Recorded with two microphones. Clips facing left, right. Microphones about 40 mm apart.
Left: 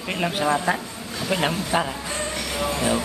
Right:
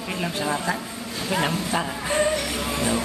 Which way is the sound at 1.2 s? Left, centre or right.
Left.